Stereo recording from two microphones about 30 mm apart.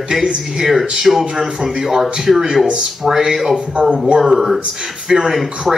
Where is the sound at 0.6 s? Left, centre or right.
Centre.